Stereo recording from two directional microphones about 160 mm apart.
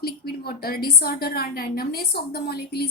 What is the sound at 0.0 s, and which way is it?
A woman's voice, 70° left (ahead or behind).